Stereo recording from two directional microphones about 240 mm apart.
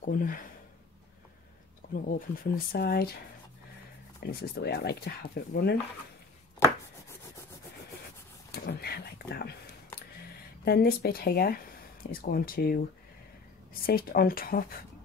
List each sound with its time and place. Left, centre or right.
0.0 s speech: left
2.0 s speech: left
4.2 s speech: left
8.5 s speech: left
10.6 s speech: left
13.8 s speech: left